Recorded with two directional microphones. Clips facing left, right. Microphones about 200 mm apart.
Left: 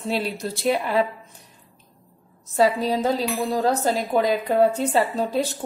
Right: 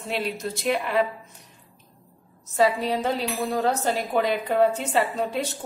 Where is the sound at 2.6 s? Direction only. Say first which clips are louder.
Left 2 dB; 40° left (ahead or behind).